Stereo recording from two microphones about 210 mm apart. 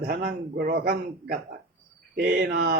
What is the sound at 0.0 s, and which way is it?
Speech, 45° right (ahead or behind).